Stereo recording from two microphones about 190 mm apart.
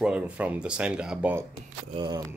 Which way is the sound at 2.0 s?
20° right (ahead or behind).